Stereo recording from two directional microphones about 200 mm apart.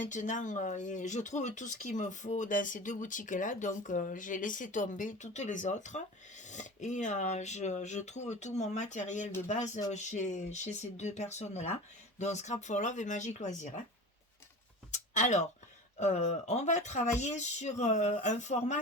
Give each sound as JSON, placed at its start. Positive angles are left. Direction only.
{"t": 0.0, "sound": "speech", "side_deg": 40}
{"t": 14.9, "sound": "a sound", "side_deg": 35}
{"t": 16.0, "sound": "speech", "side_deg": 35}